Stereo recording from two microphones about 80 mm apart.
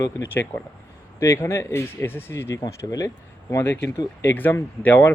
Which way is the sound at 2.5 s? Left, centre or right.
Left.